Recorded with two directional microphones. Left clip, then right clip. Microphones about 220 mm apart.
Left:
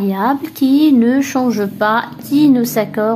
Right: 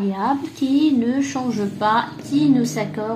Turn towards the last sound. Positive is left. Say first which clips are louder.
# left 8 dB
turn(degrees=40)  # may be behind; listen again after turning